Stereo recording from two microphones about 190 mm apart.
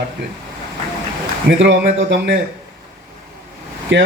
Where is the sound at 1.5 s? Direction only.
70° right (ahead or behind).